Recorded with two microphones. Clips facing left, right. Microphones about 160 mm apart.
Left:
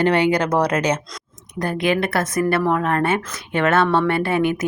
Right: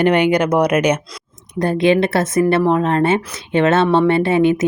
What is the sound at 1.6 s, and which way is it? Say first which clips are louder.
A woman's voice: right 6 dB; 25° right (ahead or behind).